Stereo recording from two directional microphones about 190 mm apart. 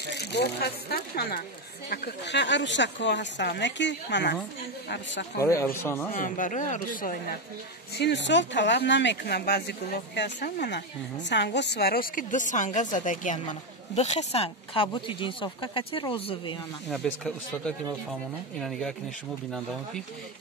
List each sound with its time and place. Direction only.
0.2 s a woman's voice: 60° left (ahead or behind)
5.4 s speech: 15° left (ahead or behind)
6.1 s speech: 45° left (ahead or behind)
8.0 s a woman's voice: 70° left (ahead or behind); by 16.5 s 25° left (ahead or behind)
16.9 s speech: 5° left (ahead or behind)